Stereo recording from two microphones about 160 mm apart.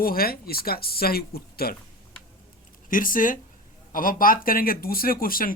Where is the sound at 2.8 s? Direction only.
60° left (ahead or behind).